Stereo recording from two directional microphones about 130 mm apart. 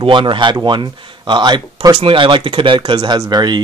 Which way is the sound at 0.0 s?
40° right (ahead or behind).